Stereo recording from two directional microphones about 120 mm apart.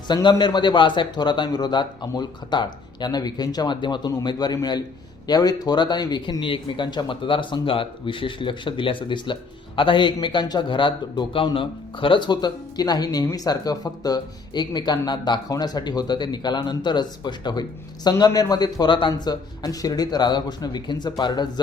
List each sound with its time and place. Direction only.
0.1 s speech: 40° left (ahead or behind)